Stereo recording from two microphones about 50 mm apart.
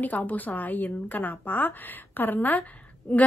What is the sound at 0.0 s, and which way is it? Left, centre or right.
A woman's voice, left.